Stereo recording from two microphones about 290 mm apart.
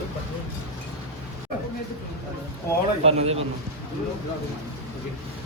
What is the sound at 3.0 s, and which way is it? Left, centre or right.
Speech, right.